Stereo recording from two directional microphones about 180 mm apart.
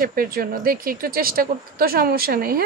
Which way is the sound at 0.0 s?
55° right (ahead or behind).